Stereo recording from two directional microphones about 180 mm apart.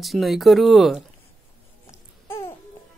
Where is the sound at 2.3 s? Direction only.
15° left (ahead or behind).